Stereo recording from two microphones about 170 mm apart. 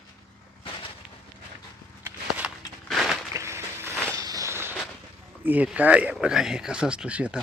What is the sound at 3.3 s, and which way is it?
Walk, 15° right (ahead or behind).